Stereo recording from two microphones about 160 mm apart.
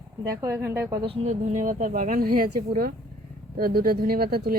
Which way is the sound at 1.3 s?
50° right (ahead or behind).